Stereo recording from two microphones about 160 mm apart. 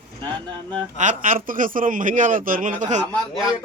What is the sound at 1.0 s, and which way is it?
A man's voice, 55° right (ahead or behind).